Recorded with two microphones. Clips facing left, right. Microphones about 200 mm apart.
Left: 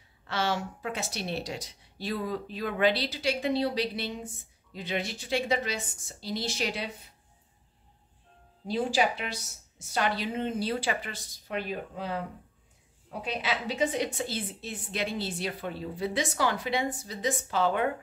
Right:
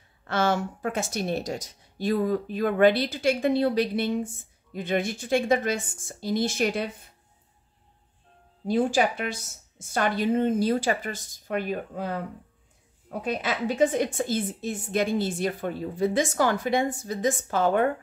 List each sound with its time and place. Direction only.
0.3 s speech: 50° right (ahead or behind)
8.6 s speech: 50° right (ahead or behind)